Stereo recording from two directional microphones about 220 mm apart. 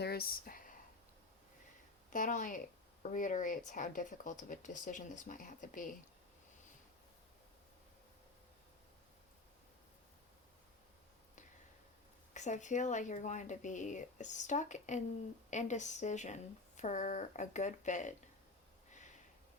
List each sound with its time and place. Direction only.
0.0 s a sound: 45° left (ahead or behind)
2.1 s speech: 35° left (ahead or behind)
12.3 s speech: 35° left (ahead or behind)